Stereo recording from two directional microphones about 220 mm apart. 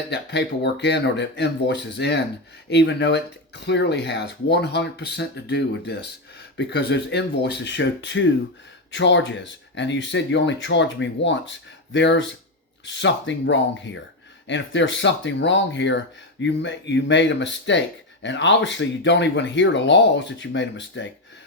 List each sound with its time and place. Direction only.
0.1 s speech: 50° left (ahead or behind)